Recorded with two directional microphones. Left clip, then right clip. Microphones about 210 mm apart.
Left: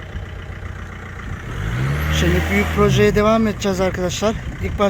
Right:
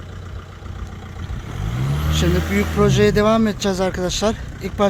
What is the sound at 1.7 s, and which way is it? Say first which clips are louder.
Vehicle: left 2 dB; 40° right (ahead or behind).